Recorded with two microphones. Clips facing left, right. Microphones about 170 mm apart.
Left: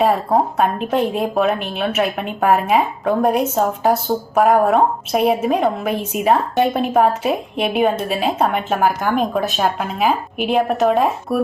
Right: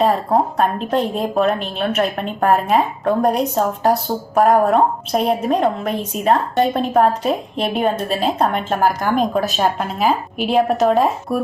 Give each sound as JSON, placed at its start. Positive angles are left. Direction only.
{"t": 0.0, "sound": "a woman's voice", "side_deg": 0}